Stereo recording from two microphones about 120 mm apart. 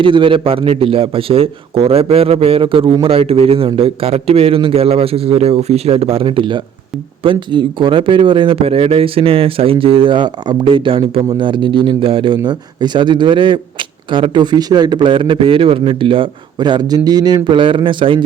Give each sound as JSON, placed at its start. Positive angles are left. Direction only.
{"t": 0.0, "sound": "a man's voice", "side_deg": -45}